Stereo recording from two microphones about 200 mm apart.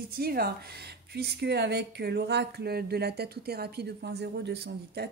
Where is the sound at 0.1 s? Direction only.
50° right (ahead or behind).